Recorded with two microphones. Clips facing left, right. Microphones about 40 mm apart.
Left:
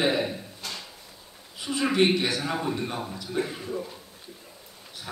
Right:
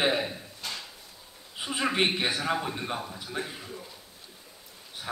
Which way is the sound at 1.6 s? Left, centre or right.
Right.